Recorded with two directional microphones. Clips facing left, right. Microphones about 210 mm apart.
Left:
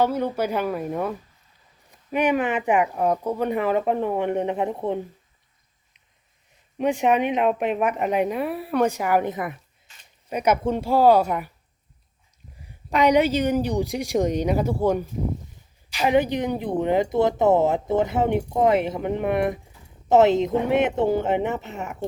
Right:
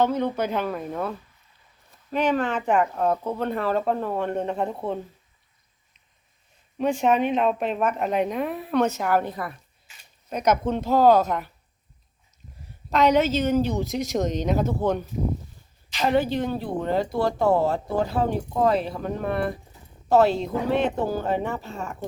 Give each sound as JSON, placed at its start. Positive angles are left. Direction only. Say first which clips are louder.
{"t": 0.0, "sound": "speech", "louder": "left 1 dB", "side_deg": 10}
{"t": 6.7, "sound": "speech", "louder": "left 1 dB", "side_deg": 15}
{"t": 12.6, "sound": "speech", "louder": "left 1 dB", "side_deg": 15}